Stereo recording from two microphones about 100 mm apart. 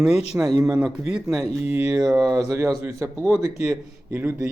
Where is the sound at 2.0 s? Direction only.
40° right (ahead or behind).